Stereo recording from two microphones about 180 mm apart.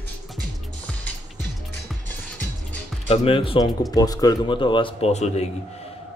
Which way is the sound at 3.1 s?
30° left (ahead or behind).